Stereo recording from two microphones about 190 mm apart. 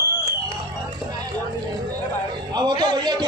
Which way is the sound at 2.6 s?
20° right (ahead or behind).